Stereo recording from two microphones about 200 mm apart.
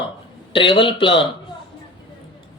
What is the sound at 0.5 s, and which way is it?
Speech, 25° left (ahead or behind).